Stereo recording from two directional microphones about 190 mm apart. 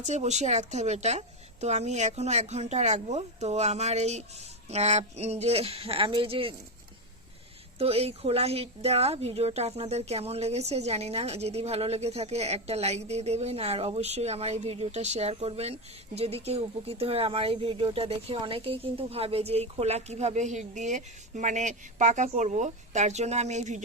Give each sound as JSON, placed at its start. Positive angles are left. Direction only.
{"t": 0.0, "sound": "speech", "side_deg": -35}
{"t": 7.8, "sound": "speech", "side_deg": -30}